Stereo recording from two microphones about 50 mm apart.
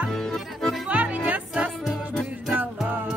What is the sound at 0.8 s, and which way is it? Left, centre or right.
Music, right.